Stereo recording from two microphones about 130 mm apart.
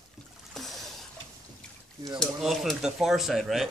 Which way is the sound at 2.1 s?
Centre (ahead or behind).